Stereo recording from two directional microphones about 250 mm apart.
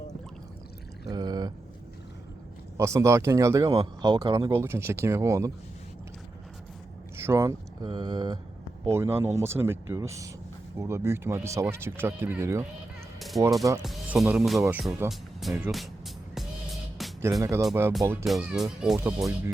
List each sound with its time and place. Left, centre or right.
1.1 s a sound: centre
2.7 s speech: centre
7.2 s speech: centre
13.1 s fowl: centre
13.8 s speech: centre
17.0 s music: centre
17.4 s speech: centre